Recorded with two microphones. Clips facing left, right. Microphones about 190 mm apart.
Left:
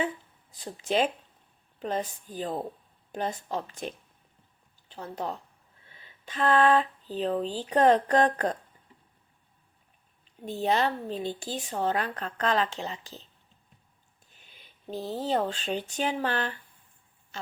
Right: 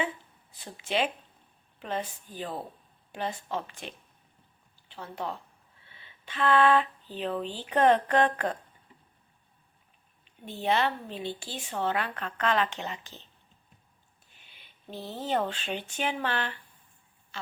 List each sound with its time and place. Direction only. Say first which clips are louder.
0.5 s a woman's voice: left 3 dB; 40° left (ahead or behind)
10.2 s a woman's voice: left 2 dB; 40° left (ahead or behind)
14.3 s a sound: left 2 dB; 40° left (ahead or behind)
15.4 s a woman's voice: left 3 dB; 40° left (ahead or behind)